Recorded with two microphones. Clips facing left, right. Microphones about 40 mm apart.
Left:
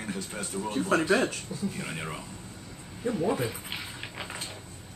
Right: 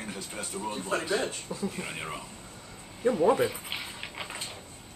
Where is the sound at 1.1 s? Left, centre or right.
Left.